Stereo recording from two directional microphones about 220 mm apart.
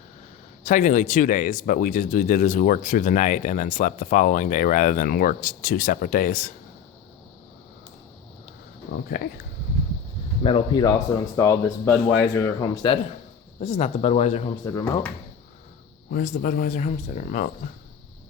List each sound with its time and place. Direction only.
0.6 s speech: 35° left (ahead or behind)
9.1 s speech: 40° left (ahead or behind)
10.4 s speech: 20° left (ahead or behind)
14.6 s speech: 15° left (ahead or behind)
16.0 s speech: 40° left (ahead or behind)